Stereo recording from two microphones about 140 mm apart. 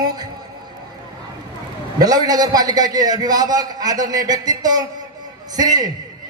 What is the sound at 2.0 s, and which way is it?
A man's voice, 30° right (ahead or behind).